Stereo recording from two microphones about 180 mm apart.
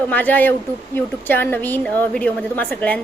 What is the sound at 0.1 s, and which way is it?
A woman's voice, 10° left (ahead or behind).